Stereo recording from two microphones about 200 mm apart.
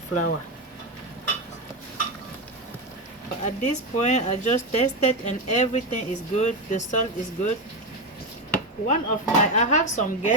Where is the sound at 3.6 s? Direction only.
35° left (ahead or behind).